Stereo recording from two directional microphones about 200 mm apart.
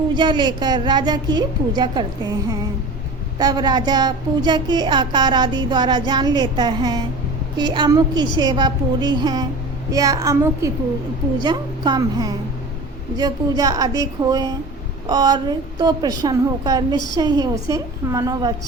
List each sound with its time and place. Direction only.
0.1 s a woman's voice: 25° right (ahead or behind)